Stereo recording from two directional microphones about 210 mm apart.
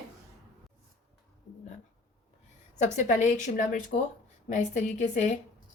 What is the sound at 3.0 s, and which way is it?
Speech, 35° left (ahead or behind).